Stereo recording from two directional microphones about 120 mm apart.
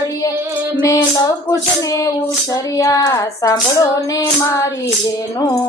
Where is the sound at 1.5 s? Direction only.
25° left (ahead or behind).